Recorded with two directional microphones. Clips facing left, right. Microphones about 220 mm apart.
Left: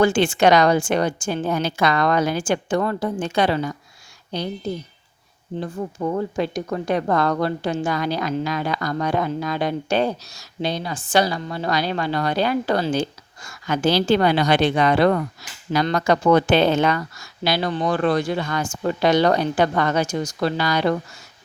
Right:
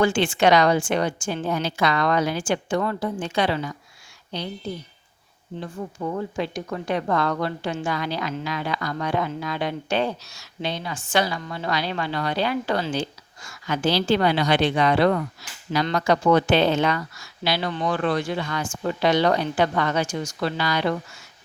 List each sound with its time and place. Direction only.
0.0 s speech: 40° left (ahead or behind)
5.5 s speech: 40° left (ahead or behind)